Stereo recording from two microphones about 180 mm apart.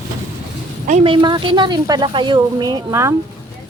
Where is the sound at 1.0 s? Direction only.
25° right (ahead or behind).